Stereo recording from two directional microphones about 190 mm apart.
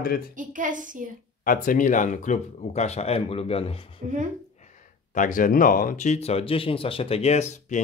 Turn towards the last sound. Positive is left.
turn(degrees=35)  # may be behind; listen again after turning